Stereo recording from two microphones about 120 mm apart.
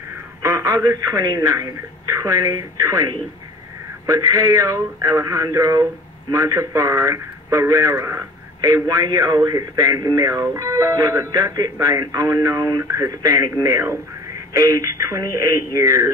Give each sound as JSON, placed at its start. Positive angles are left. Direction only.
{"t": 0.4, "sound": "speech", "side_deg": -30}